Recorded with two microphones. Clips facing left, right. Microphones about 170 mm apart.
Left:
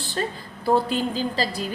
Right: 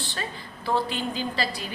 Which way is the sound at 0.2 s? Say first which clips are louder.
Left 12 dB; 45° left (ahead or behind).